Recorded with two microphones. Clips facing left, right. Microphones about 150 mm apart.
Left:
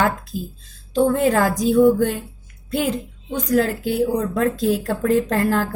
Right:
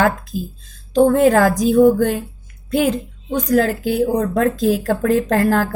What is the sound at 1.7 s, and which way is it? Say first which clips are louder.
Speech: right 2 dB; 45° right (ahead or behind).